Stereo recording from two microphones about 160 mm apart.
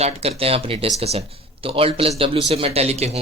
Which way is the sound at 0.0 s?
40° right (ahead or behind).